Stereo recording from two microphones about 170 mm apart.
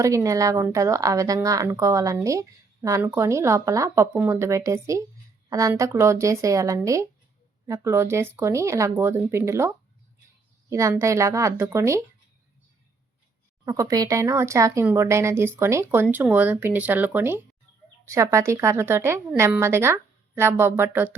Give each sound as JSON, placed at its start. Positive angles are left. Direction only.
{"t": 0.0, "sound": "speech", "side_deg": -20}
{"t": 13.7, "sound": "speech", "side_deg": -20}